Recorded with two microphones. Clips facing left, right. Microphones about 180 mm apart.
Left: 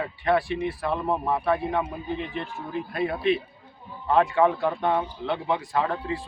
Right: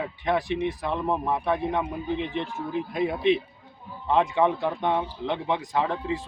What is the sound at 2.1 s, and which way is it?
Speech, 20° right (ahead or behind).